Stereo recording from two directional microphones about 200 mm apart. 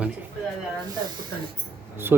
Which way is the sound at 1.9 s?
10° right (ahead or behind).